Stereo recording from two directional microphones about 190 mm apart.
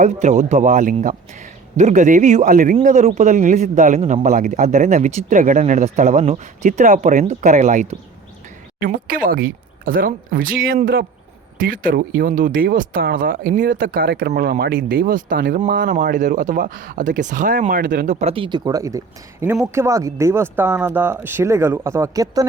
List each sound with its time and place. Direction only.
0.0 s a man's voice: 40° right (ahead or behind); by 22.4 s 20° right (ahead or behind)